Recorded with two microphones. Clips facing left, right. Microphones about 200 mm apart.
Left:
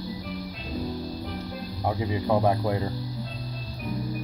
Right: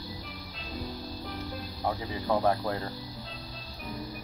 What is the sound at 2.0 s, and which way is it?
Speech, 15° left (ahead or behind).